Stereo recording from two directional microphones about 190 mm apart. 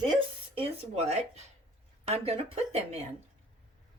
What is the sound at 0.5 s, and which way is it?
Speech, 35° right (ahead or behind).